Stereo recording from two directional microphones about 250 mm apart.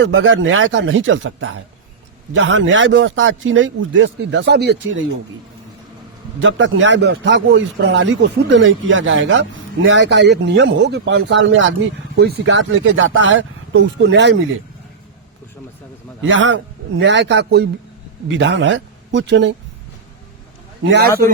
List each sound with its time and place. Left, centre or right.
0.0 s a man's voice: right
6.4 s a man's voice: right
16.2 s a man's voice: right
20.8 s a man's voice: right